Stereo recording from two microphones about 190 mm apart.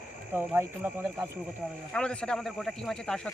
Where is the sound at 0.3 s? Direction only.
10° right (ahead or behind).